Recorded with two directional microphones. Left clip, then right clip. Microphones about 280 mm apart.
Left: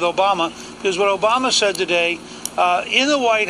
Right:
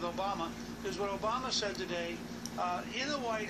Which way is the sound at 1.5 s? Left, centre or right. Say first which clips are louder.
Left 18 dB; left.